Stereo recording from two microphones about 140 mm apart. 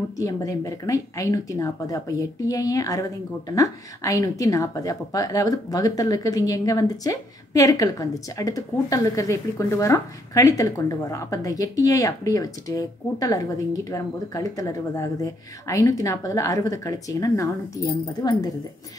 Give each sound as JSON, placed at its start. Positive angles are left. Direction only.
{"t": 0.2, "sound": "a woman's voice", "side_deg": 25}